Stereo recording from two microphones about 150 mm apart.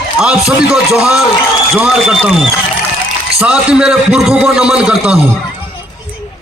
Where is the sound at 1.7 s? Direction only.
10° right (ahead or behind).